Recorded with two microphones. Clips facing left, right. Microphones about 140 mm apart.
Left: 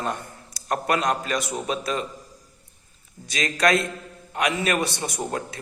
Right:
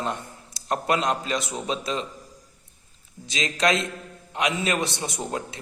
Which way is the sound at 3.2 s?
20° right (ahead or behind).